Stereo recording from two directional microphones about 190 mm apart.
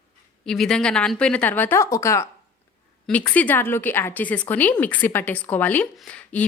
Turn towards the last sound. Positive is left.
turn(degrees=5)  # may be behind; listen again after turning